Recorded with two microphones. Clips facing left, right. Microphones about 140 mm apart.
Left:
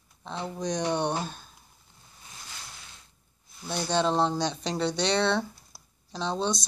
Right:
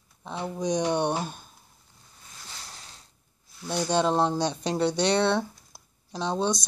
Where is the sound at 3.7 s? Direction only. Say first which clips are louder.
Right 2 dB; 10° right (ahead or behind).